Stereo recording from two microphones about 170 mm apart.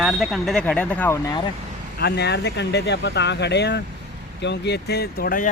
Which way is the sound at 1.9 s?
70° left (ahead or behind).